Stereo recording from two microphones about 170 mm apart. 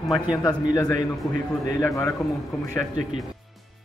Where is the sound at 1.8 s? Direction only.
15° left (ahead or behind).